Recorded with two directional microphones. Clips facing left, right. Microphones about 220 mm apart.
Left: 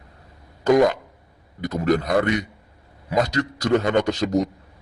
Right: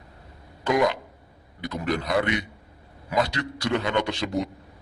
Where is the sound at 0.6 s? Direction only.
45° left (ahead or behind).